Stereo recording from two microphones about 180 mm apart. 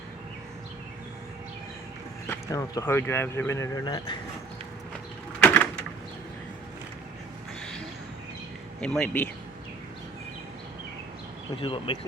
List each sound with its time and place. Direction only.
2.3 s speech: 20° left (ahead or behind)
5.4 s a sound: 10° left (ahead or behind)
8.8 s speech: 5° left (ahead or behind)
11.5 s speech: 30° left (ahead or behind)